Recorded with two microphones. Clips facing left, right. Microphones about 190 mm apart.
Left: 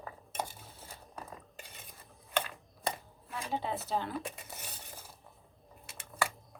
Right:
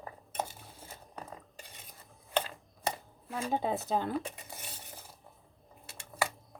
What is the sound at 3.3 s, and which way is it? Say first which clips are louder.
Speech: right 4 dB; 50° right (ahead or behind).